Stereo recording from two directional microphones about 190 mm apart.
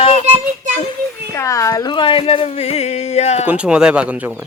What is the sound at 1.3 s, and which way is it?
Speech, 15° left (ahead or behind).